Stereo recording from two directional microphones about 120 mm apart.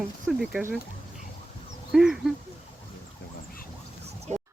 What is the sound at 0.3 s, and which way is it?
Duck, centre (ahead or behind).